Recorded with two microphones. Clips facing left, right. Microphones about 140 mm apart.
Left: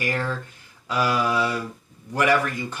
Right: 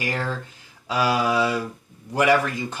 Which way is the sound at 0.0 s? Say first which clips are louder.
Left 1 dB; 20° right (ahead or behind).